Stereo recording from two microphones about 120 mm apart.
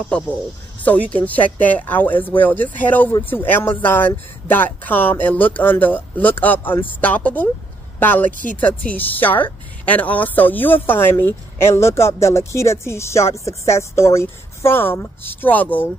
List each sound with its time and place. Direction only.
0.8 s speech: 10° left (ahead or behind)